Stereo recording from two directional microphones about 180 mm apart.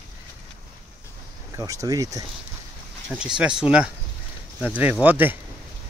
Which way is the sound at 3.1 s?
5° right (ahead or behind).